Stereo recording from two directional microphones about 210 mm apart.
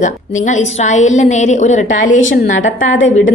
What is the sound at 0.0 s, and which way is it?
A woman's voice, 35° left (ahead or behind).